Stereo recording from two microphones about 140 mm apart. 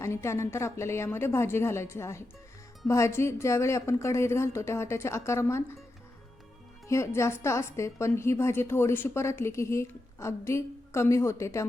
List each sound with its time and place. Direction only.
0.0 s a woman's voice: 20° left (ahead or behind)
6.8 s a woman's voice: 20° left (ahead or behind)